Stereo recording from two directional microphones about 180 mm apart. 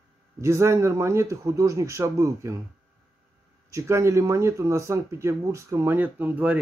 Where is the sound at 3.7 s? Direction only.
15° right (ahead or behind).